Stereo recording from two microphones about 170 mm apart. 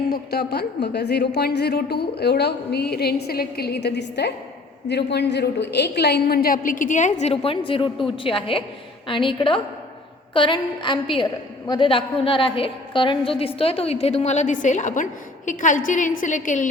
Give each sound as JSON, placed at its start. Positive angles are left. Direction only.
{"t": 0.1, "sound": "a woman's voice", "side_deg": 70}